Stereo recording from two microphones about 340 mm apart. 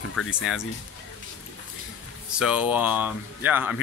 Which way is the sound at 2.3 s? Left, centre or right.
Centre.